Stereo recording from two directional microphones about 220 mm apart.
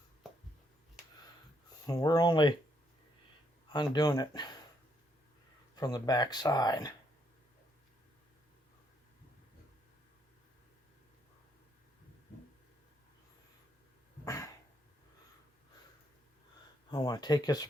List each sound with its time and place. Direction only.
0.2 s a sound: centre (ahead or behind)
1.9 s speech: 15° left (ahead or behind)
3.7 s speech: 20° left (ahead or behind)
5.7 s speech: 15° left (ahead or behind)
14.3 s a sound: 15° left (ahead or behind)
16.9 s speech: 20° left (ahead or behind)